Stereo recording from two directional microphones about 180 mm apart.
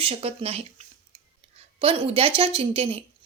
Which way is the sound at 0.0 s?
30° right (ahead or behind).